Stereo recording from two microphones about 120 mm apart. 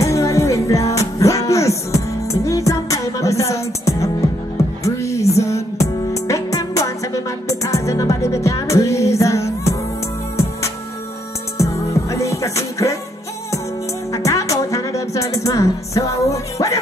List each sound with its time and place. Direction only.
0.0 s music: 25° left (ahead or behind)
11.5 s music: 25° left (ahead or behind)
14.1 s music: 25° left (ahead or behind)